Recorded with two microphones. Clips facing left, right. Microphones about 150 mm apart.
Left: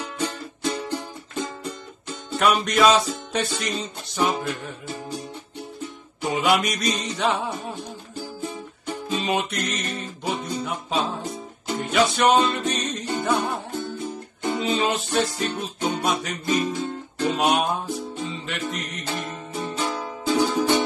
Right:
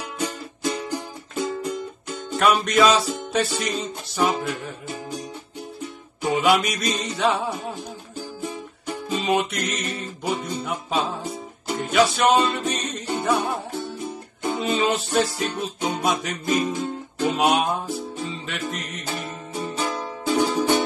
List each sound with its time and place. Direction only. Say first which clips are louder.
0.7 s music: even; 10° right (ahead or behind)
2.3 s music: right 1 dB; 5° left (ahead or behind)
6.2 s music: right 2 dB; centre (ahead or behind)
14.6 s music: right 2 dB; centre (ahead or behind)